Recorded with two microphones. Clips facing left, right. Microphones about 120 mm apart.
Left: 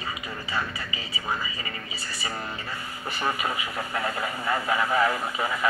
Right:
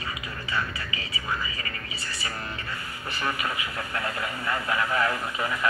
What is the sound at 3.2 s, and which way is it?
Speech, 25° left (ahead or behind).